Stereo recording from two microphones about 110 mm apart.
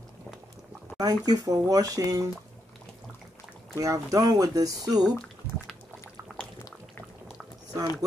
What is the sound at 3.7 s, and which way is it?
Speech, 30° right (ahead or behind).